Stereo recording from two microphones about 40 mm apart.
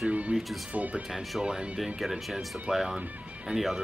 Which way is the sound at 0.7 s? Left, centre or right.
Right.